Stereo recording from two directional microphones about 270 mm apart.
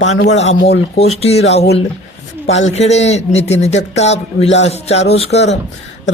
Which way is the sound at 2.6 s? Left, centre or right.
Left.